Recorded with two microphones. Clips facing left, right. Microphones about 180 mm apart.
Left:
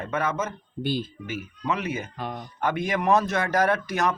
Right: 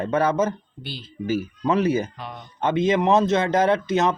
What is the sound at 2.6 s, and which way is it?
Speech, 20° right (ahead or behind).